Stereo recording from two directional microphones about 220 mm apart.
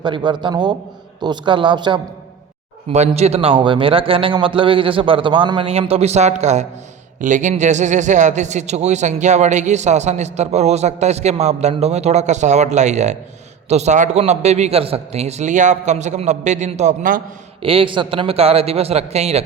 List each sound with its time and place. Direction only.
0.0 s a man's voice: 20° right (ahead or behind); by 17.2 s 40° right (ahead or behind)
17.6 s a man's voice: 25° right (ahead or behind)